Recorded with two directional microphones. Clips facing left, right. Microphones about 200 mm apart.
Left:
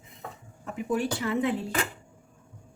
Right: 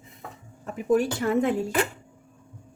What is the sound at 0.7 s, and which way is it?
Speech, 45° right (ahead or behind).